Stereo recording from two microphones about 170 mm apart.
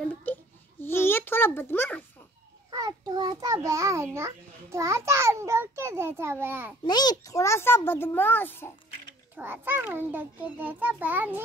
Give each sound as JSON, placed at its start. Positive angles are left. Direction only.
{"t": 0.0, "sound": "a sound", "side_deg": 10}
{"t": 2.7, "sound": "a child's voice", "side_deg": -20}
{"t": 6.8, "sound": "a child's voice", "side_deg": 25}
{"t": 9.4, "sound": "a child's voice", "side_deg": -10}